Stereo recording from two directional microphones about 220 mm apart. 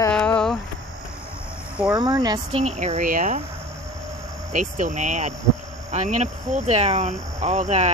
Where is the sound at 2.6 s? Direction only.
30° right (ahead or behind).